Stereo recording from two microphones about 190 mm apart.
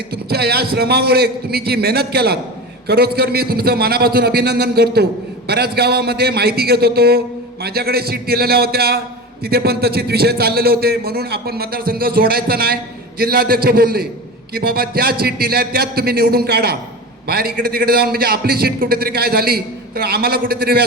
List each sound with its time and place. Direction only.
0.1 s a man's voice: 55° right (ahead or behind)